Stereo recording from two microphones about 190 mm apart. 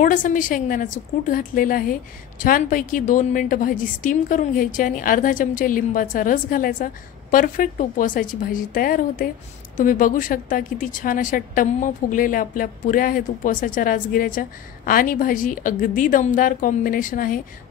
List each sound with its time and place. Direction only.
0.0 s a woman's voice: 45° left (ahead or behind)